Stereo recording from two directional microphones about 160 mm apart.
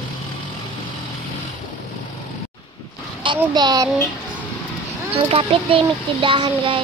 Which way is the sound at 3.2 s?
30° right (ahead or behind).